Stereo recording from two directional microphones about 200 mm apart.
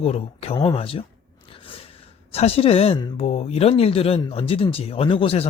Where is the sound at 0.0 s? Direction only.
30° left (ahead or behind).